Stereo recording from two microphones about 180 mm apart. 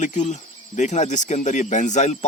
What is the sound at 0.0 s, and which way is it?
Speech, 40° left (ahead or behind).